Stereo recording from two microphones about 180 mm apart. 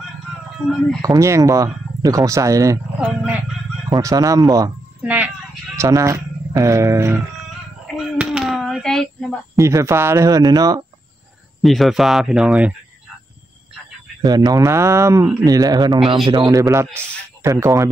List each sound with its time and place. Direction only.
1.0 s speech: 15° right (ahead or behind)
3.9 s speech: 20° right (ahead or behind)
5.0 s chicken: 5° right (ahead or behind)
5.9 s speech: 15° right (ahead or behind)
7.8 s a sound: centre (ahead or behind)
9.6 s speech: 15° right (ahead or behind)
11.6 s speech: centre (ahead or behind)
14.2 s speech: 20° right (ahead or behind)